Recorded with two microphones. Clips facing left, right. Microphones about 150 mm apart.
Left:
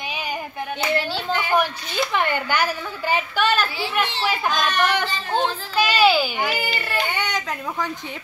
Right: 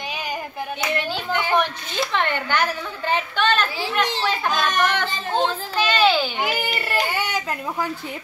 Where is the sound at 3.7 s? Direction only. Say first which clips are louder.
Right 1 dB; 40° right (ahead or behind).